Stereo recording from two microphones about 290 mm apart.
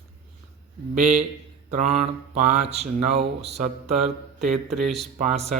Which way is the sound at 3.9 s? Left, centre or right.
Centre.